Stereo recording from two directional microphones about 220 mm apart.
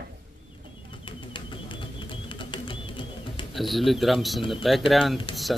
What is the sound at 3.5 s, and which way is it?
Speech, centre (ahead or behind).